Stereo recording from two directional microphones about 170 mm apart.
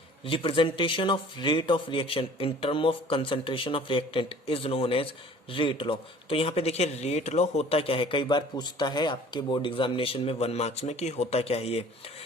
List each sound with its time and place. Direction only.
0.3 s speech: 30° left (ahead or behind)